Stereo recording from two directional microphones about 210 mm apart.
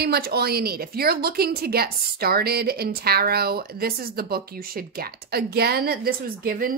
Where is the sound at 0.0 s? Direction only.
50° right (ahead or behind).